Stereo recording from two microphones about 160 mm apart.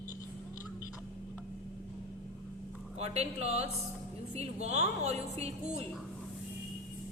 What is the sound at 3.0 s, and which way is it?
A woman's voice, 40° right (ahead or behind).